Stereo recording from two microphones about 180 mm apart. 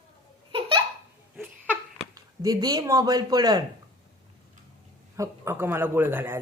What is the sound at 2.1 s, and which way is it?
Speech, 20° right (ahead or behind).